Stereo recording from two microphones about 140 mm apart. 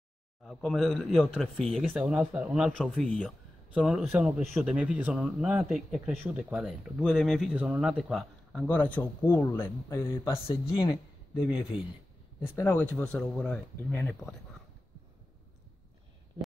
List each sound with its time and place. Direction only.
0.5 s speech: centre (ahead or behind)
8.6 s speech: 10° left (ahead or behind)
10.4 s speech: 35° left (ahead or behind)
12.4 s speech: 20° left (ahead or behind)
12.9 s speech: 5° left (ahead or behind)